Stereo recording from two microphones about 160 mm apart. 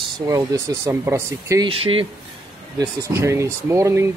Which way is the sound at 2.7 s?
20° right (ahead or behind).